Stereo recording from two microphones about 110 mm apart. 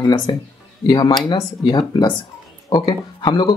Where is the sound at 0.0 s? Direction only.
40° left (ahead or behind).